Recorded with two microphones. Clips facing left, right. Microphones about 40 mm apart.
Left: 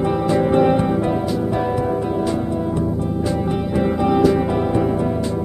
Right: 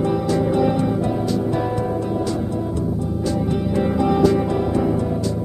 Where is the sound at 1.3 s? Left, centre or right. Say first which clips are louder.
Left 1 dB; centre.